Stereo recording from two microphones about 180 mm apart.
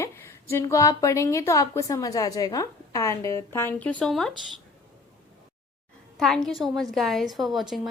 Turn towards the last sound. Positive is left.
turn(degrees=0)  # may be behind; listen again after turning